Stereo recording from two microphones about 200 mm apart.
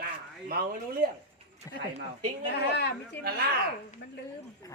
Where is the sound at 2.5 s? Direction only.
60° left (ahead or behind).